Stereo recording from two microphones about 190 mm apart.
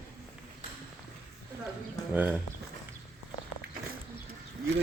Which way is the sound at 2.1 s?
10° right (ahead or behind).